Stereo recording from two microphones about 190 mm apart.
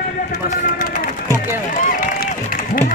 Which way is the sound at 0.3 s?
45° left (ahead or behind).